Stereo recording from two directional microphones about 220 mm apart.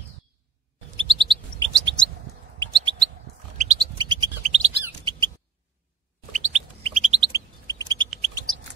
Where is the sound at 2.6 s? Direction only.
20° right (ahead or behind).